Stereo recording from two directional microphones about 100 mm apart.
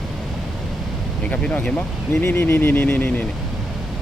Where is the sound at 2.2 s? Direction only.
25° left (ahead or behind).